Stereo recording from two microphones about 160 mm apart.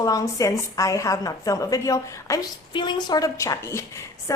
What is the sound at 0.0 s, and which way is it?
A woman's voice, 20° left (ahead or behind).